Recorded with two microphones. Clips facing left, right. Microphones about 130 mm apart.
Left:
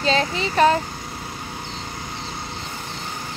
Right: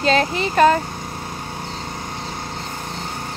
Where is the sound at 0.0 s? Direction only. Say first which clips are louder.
Right 3 dB; 55° right (ahead or behind).